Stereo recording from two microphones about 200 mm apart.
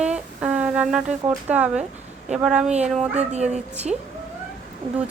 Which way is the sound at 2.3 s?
5° right (ahead or behind).